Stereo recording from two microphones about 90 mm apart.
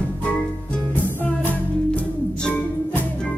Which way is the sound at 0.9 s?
20° left (ahead or behind).